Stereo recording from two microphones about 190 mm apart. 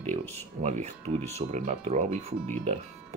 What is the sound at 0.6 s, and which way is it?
Speech, 40° right (ahead or behind).